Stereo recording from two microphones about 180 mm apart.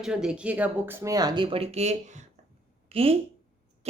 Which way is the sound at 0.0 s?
5° right (ahead or behind).